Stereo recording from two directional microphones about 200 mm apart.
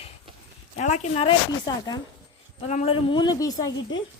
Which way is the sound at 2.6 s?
30° left (ahead or behind).